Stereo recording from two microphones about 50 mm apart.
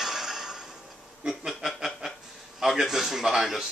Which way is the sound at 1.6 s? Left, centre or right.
Centre.